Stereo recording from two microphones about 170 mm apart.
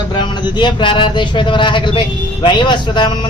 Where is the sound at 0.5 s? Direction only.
30° left (ahead or behind).